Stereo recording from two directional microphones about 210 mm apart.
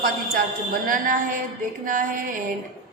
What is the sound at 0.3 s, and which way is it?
A woman's voice, 40° right (ahead or behind).